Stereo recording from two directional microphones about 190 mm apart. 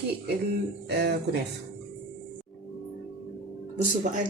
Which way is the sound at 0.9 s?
60° right (ahead or behind).